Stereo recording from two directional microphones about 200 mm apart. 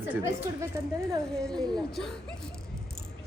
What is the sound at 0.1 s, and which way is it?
Speech, 15° right (ahead or behind).